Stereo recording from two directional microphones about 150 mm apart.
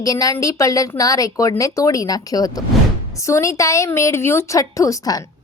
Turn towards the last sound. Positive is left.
turn(degrees=20)  # may be behind; listen again after turning